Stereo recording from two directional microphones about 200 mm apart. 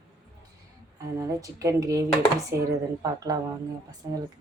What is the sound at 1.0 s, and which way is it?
Speech, 15° right (ahead or behind).